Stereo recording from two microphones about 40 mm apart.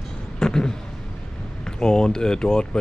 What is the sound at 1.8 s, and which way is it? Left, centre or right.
Speech, centre.